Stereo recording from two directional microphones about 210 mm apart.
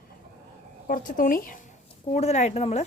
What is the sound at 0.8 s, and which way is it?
Speech, 40° left (ahead or behind).